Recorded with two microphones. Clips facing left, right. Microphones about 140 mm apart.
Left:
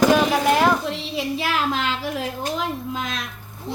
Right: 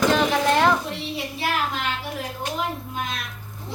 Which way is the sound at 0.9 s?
90° left.